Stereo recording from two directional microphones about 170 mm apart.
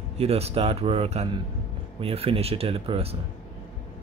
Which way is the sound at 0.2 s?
35° right (ahead or behind).